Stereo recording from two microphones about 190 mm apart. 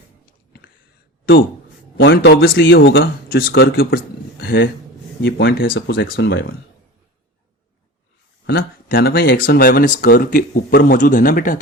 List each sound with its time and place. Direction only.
1.2 s speech: 55° left (ahead or behind)
2.0 s speech: 70° left (ahead or behind)
2.6 s speech: 75° left (ahead or behind)
3.0 s speech: 50° left (ahead or behind)
5.2 s speech: 70° left (ahead or behind); by 6.0 s 55° left (ahead or behind)
6.1 s speech: 65° left (ahead or behind)
8.4 s speech: 55° left (ahead or behind)